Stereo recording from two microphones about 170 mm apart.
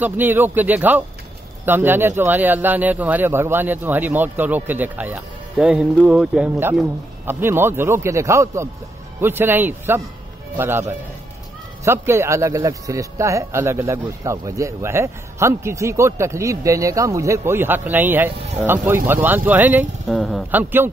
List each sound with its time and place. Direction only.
0.0 s speech: 10° right (ahead or behind)
20.2 s speech: centre (ahead or behind)
20.5 s speech: 10° right (ahead or behind)